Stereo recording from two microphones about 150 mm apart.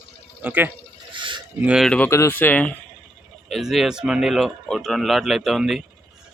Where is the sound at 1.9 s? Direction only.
15° left (ahead or behind).